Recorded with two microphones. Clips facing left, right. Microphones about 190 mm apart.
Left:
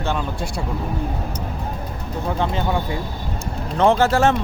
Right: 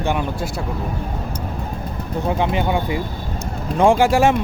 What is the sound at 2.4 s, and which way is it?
Speech, 15° right (ahead or behind).